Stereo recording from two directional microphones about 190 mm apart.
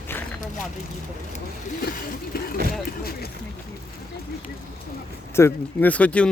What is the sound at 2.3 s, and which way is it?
Vehicle, 50° left (ahead or behind).